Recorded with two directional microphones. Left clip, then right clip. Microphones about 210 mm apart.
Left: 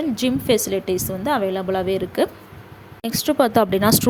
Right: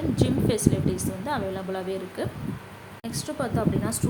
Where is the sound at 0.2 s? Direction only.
35° left (ahead or behind).